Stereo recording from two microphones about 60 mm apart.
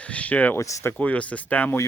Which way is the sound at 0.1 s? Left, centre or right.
Left.